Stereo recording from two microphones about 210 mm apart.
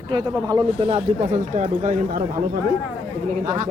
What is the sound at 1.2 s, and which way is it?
Speech, 35° right (ahead or behind).